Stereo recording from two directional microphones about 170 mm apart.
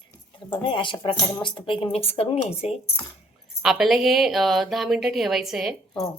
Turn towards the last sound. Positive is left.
turn(degrees=0)  # may be behind; listen again after turning